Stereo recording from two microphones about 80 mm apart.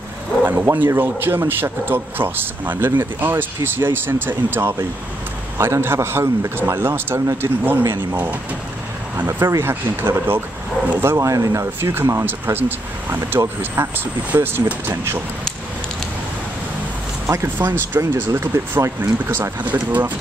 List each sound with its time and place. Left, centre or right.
0.5 s speech: right
7.2 s speech: right
11.8 s speech: right
17.6 s speech: right